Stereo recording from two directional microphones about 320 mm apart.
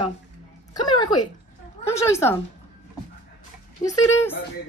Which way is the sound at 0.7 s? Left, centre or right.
Centre.